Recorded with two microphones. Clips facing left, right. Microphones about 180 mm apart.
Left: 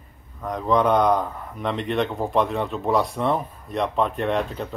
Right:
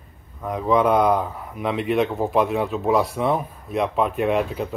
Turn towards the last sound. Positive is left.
turn(degrees=-5)  # may be behind; listen again after turning